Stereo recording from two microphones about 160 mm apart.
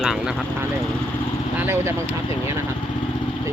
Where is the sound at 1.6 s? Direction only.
15° right (ahead or behind).